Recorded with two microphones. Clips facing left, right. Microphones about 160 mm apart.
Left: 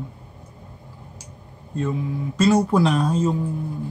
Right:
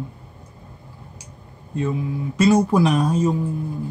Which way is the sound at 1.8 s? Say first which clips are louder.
Right 1 dB; 10° right (ahead or behind).